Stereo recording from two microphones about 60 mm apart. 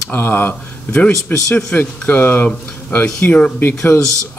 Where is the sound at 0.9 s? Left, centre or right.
Left.